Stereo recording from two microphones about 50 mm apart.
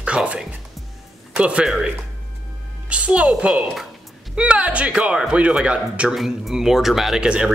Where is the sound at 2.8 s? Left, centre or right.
Right.